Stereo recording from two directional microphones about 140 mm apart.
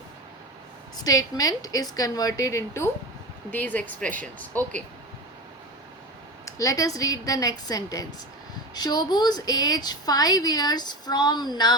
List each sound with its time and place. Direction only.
0.9 s a woman's voice: 25° left (ahead or behind); by 4.8 s 10° left (ahead or behind)
6.4 s a woman's voice: 25° left (ahead or behind)